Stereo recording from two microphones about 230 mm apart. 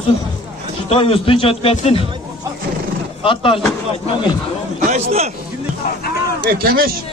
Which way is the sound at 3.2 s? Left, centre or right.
Left.